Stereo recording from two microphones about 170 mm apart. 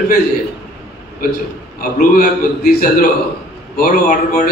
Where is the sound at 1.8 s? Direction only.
55° left (ahead or behind).